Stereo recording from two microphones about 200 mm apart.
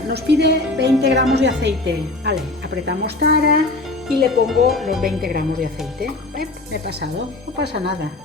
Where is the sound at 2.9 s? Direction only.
55° right (ahead or behind).